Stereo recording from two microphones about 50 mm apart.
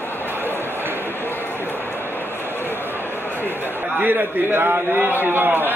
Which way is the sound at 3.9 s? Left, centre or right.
Right.